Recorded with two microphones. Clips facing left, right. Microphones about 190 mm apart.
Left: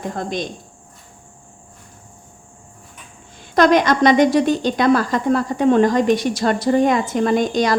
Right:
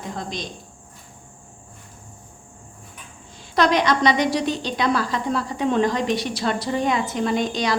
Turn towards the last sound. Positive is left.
turn(degrees=45)  # may be behind; listen again after turning